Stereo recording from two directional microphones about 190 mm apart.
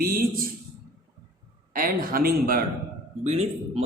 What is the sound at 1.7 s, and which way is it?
Mantra, 50° right (ahead or behind).